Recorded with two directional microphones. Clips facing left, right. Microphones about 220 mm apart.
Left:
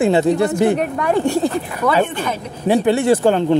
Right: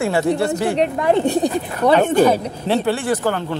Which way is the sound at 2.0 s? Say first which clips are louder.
Right 10 dB; 40° right (ahead or behind).